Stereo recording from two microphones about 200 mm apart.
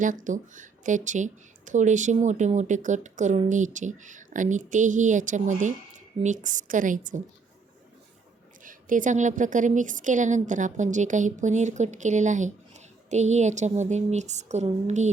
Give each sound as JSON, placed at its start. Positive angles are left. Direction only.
{"t": 0.0, "sound": "a woman's voice", "side_deg": -40}
{"t": 8.6, "sound": "a woman's voice", "side_deg": -40}